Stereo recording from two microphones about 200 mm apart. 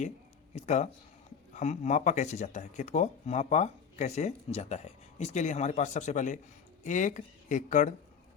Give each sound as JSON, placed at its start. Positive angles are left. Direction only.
{"t": 0.5, "sound": "speech", "side_deg": 35}